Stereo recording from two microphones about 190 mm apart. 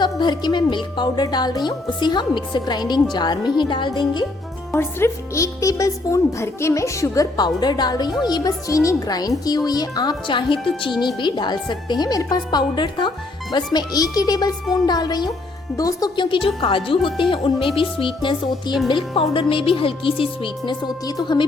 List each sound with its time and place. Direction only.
0.0 s speech: 20° left (ahead or behind)
4.7 s speech: 15° left (ahead or behind)